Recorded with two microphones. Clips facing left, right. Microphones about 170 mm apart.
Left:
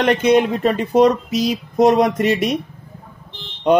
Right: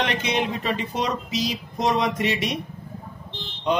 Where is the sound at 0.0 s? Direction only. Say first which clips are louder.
Left 10 dB; 50° left (ahead or behind).